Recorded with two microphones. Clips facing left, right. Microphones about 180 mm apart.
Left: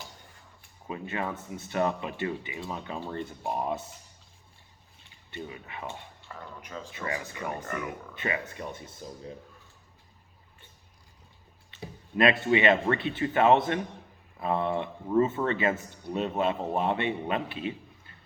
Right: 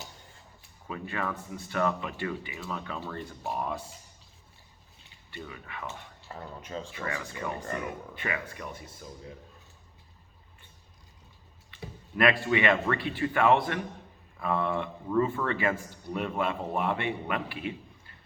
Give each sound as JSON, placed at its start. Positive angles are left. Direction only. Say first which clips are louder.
{"t": 0.9, "sound": "speech", "louder": "left 1 dB", "side_deg": 20}
{"t": 5.3, "sound": "speech", "louder": "left 2 dB", "side_deg": 20}
{"t": 6.3, "sound": "speech", "louder": "right 3 dB", "side_deg": -25}
{"t": 6.9, "sound": "speech", "louder": "left 4 dB", "side_deg": 25}
{"t": 7.6, "sound": "speech", "louder": "even", "side_deg": -30}
{"t": 8.1, "sound": "speech", "louder": "left 2 dB", "side_deg": 25}
{"t": 11.7, "sound": "speech", "louder": "left 3 dB", "side_deg": 25}